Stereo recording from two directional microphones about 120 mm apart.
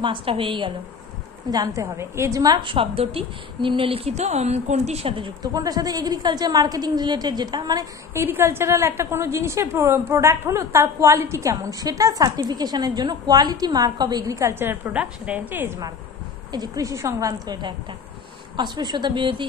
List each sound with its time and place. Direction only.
0.0 s a woman's voice: 45° right (ahead or behind)
1.5 s a woman's voice: 30° right (ahead or behind)
8.1 s a woman's voice: 20° right (ahead or behind)
16.5 s a woman's voice: 30° right (ahead or behind)